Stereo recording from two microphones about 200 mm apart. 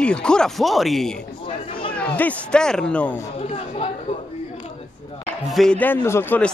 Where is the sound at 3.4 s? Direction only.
30° left (ahead or behind).